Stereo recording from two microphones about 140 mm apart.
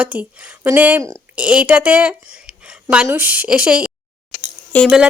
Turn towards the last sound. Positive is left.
turn(degrees=10)  # may be behind; listen again after turning